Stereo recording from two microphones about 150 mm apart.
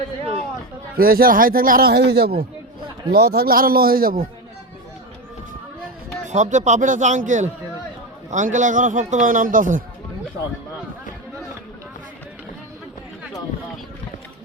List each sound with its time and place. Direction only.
0.9 s speech: 85° right
6.2 s a man's voice: 50° right (ahead or behind)